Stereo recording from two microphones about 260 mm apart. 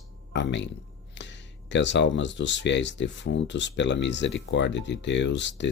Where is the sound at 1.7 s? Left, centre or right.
Left.